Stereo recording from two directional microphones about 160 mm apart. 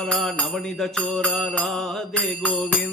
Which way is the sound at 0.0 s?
5° left (ahead or behind).